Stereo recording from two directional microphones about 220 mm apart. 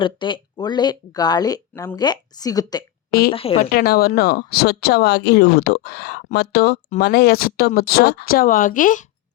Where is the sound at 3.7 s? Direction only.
45° left (ahead or behind).